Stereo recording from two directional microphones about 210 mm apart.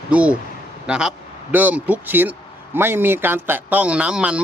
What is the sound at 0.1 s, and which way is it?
A man's voice, 5° right (ahead or behind).